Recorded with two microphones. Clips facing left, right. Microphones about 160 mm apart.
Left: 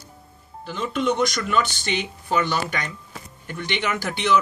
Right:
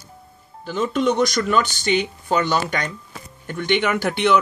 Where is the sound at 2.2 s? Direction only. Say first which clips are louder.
Right 3 dB; 40° right (ahead or behind).